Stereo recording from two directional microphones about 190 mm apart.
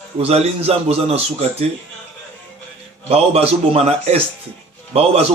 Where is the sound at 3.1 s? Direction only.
30° right (ahead or behind).